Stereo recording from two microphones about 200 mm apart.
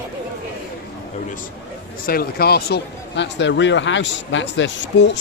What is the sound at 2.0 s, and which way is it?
Speech, 50° left (ahead or behind).